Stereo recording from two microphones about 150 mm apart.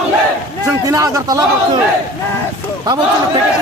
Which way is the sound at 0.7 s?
20° right (ahead or behind).